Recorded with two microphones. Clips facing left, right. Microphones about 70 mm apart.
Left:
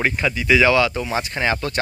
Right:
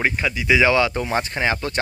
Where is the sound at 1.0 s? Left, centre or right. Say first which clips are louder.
Right 1 dB; right.